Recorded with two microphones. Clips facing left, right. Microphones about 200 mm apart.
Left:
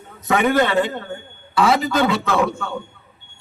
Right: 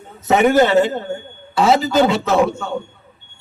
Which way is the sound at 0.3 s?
25° right (ahead or behind).